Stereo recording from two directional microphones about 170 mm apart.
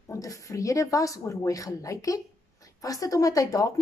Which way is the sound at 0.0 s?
20° left (ahead or behind).